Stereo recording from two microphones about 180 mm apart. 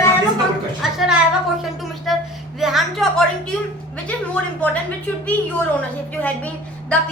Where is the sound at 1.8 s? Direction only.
Centre (ahead or behind).